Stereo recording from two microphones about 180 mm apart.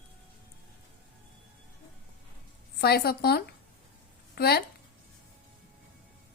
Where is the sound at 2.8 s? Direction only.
60° left (ahead or behind).